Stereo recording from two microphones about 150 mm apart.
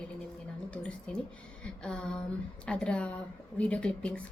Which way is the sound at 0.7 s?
5° left (ahead or behind).